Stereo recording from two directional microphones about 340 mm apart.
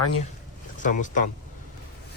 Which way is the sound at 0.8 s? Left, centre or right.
Left.